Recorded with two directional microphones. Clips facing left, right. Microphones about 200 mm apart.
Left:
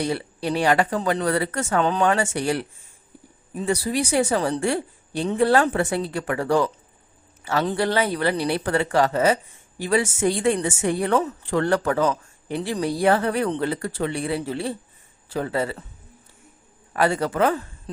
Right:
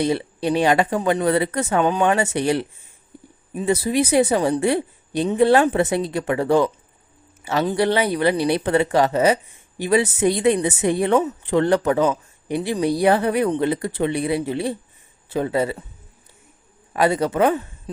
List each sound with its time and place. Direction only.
0.0 s a woman's voice: 20° right (ahead or behind)
16.9 s a woman's voice: 20° right (ahead or behind)